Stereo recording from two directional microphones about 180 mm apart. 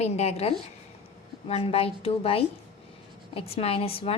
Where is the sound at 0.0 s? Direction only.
35° left (ahead or behind).